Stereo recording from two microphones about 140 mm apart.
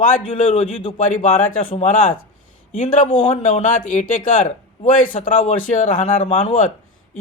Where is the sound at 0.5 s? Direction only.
40° left (ahead or behind).